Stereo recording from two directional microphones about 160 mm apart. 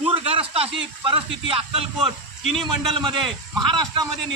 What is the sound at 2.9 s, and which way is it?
A man's voice, 30° right (ahead or behind).